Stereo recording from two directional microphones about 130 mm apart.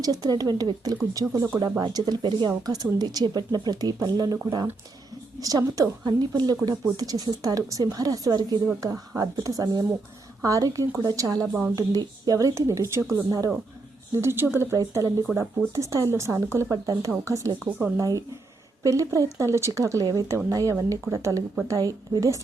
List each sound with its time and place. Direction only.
0.0 s speech: 30° right (ahead or behind)
5.4 s speech: 25° right (ahead or behind)
11.4 s a woman's voice: 10° right (ahead or behind)
11.7 s speech: 30° right (ahead or behind)